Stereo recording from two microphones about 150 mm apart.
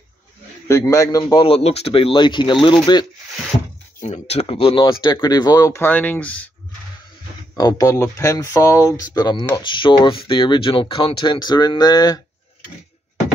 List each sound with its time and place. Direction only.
0.7 s speech: 20° left (ahead or behind)
1.2 s speech: 35° left (ahead or behind)
4.0 s speech: 45° left (ahead or behind); by 6.5 s 10° left (ahead or behind)
7.5 s speech: 25° left (ahead or behind)